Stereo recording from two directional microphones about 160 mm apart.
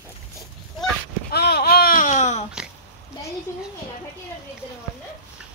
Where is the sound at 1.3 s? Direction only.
85° left; by 2.4 s 45° left (ahead or behind).